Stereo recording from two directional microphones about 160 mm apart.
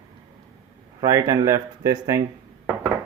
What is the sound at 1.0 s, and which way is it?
Speech, 20° right (ahead or behind).